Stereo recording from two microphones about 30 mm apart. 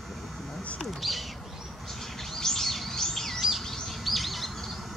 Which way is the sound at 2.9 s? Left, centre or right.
Centre.